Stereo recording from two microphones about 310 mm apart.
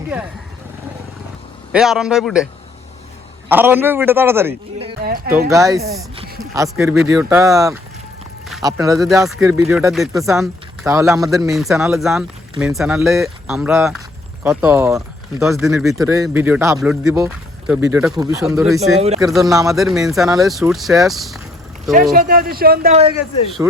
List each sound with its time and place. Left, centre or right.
1.7 s speech: centre
3.5 s speech: centre
5.0 s speech: right
5.5 s speech: centre
9.0 s speech: centre
22.1 s speech: right